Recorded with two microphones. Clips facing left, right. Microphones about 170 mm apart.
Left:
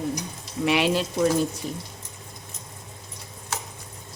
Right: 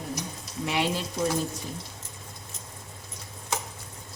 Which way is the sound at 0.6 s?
85° left.